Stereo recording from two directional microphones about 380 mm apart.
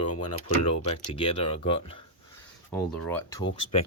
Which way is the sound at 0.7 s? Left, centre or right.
Centre.